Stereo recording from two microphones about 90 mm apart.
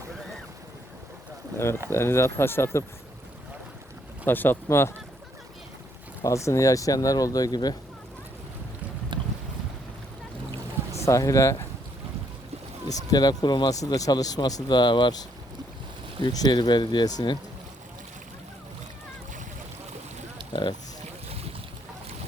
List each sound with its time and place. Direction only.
1.5 s speech: 30° left (ahead or behind)
4.3 s speech: 25° left (ahead or behind)
6.2 s speech: 35° left (ahead or behind)
9.1 s boat: 65° right (ahead or behind)
10.9 s speech: 35° left (ahead or behind)
12.9 s speech: 45° left (ahead or behind)
16.3 s speech: 50° left (ahead or behind)
20.5 s speech: 60° left (ahead or behind)